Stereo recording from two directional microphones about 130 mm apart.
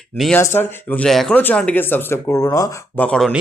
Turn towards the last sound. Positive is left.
turn(degrees=5)  # may be behind; listen again after turning